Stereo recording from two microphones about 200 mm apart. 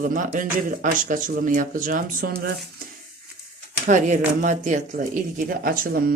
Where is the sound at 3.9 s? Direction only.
40° right (ahead or behind).